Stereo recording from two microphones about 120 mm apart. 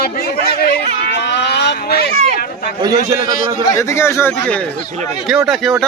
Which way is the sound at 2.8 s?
30° right (ahead or behind).